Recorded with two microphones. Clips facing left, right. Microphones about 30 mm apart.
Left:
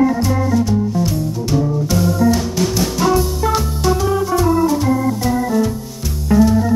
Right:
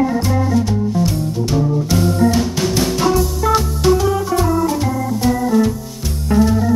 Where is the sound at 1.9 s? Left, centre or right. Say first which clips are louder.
Even; right.